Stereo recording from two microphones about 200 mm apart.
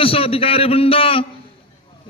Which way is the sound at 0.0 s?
30° left (ahead or behind).